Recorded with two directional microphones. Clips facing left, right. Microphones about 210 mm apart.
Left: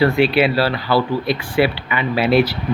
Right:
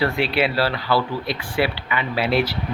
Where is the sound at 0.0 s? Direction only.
10° left (ahead or behind).